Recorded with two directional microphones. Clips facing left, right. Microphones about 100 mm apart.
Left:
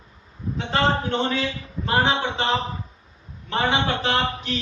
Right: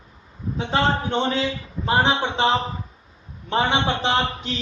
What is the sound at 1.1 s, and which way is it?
Speech, 20° right (ahead or behind).